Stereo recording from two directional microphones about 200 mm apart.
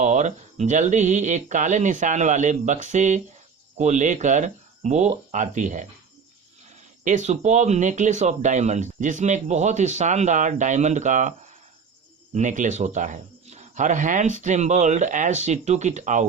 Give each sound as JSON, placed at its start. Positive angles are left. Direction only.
{"t": 0.0, "sound": "speech", "side_deg": -35}
{"t": 7.0, "sound": "speech", "side_deg": -35}